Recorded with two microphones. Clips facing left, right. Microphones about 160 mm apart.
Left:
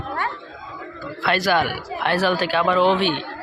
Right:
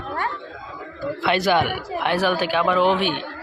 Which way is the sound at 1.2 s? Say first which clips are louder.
Even; 20° right (ahead or behind).